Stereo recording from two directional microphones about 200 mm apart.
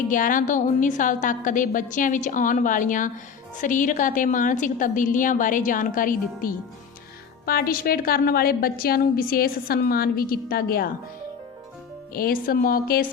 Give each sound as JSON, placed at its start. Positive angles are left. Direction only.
{"t": 0.1, "sound": "a woman's voice", "side_deg": 40}
{"t": 12.1, "sound": "a woman's voice", "side_deg": 45}